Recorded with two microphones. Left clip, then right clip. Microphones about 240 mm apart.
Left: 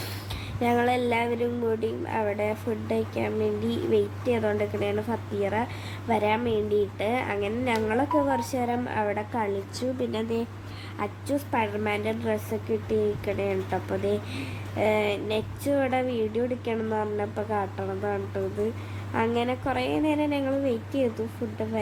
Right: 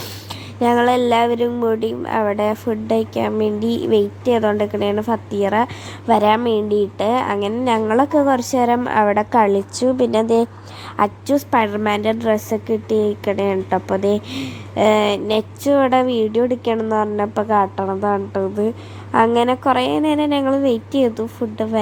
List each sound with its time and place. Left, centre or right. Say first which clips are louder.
0.6 s a woman's voice: right 9 dB; right